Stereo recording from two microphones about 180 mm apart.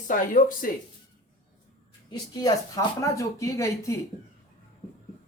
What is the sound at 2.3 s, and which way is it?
Speech, 20° left (ahead or behind).